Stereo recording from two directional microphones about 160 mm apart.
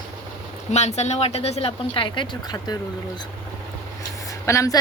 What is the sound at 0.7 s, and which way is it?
Speech, 45° left (ahead or behind).